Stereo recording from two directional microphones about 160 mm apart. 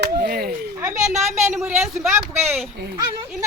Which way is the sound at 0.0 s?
70° right (ahead or behind).